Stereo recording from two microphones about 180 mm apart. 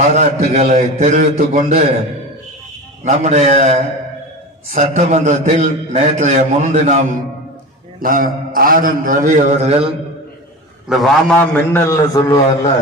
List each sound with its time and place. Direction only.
0.0 s a man's voice: 40° right (ahead or behind)
3.0 s a man's voice: 40° right (ahead or behind)
7.9 s a man's voice: 50° right (ahead or behind); by 9.9 s 35° right (ahead or behind)
10.8 s a man's voice: centre (ahead or behind); by 12.4 s 20° left (ahead or behind)